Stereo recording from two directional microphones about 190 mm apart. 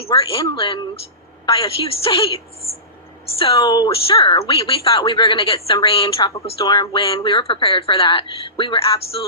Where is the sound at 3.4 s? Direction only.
25° left (ahead or behind).